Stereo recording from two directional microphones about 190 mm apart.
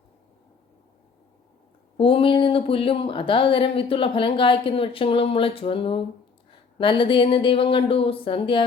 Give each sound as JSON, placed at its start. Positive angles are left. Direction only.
{"t": 2.0, "sound": "speech", "side_deg": 30}